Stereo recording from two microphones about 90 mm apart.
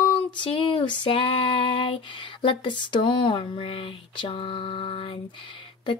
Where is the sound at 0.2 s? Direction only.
75° left (ahead or behind).